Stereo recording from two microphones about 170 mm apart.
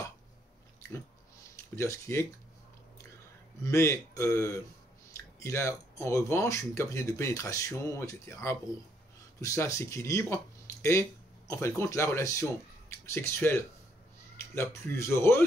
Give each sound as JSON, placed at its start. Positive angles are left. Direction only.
{"t": 1.8, "sound": "speech", "side_deg": 15}
{"t": 3.6, "sound": "speech", "side_deg": 15}